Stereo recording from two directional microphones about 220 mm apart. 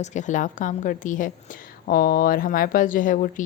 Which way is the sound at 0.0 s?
35° left (ahead or behind).